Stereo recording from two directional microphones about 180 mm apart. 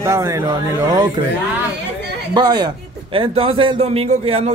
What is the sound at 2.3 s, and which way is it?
A man's voice, 25° right (ahead or behind).